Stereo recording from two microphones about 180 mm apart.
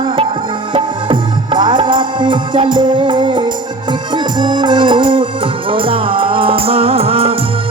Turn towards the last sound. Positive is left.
turn(degrees=-35)  # may be behind; listen again after turning